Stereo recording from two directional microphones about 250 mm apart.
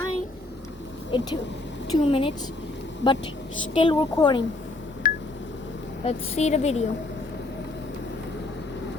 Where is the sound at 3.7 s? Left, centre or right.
Centre.